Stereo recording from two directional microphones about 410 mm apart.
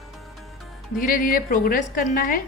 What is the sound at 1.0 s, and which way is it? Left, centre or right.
A woman's voice, left.